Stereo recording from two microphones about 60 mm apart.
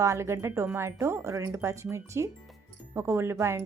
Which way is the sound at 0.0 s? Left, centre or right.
Right.